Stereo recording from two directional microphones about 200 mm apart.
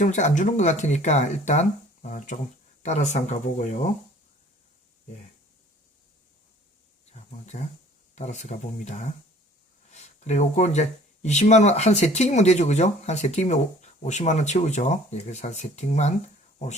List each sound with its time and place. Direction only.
0.0 s speech: 35° left (ahead or behind)
7.1 s speech: 35° left (ahead or behind)